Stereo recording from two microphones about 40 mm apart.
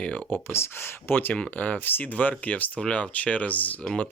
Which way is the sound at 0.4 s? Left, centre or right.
Left.